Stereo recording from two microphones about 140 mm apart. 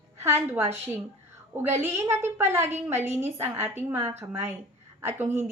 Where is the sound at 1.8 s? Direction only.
15° right (ahead or behind).